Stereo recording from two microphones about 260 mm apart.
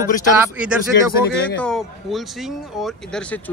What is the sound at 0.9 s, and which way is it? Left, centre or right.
Speech, left.